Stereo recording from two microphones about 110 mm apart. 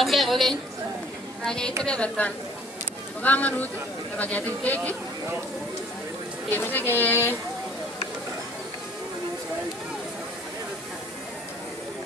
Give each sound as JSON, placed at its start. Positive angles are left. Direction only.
{"t": 0.0, "sound": "a woman's voice", "side_deg": 0}
{"t": 6.5, "sound": "speech", "side_deg": 15}